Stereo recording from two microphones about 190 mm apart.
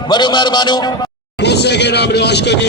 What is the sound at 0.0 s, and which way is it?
A man's voice, 25° left (ahead or behind).